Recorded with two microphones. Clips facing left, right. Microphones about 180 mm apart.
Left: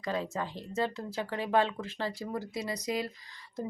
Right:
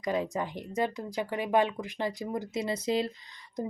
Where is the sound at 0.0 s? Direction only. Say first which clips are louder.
Right 3 dB; 15° right (ahead or behind).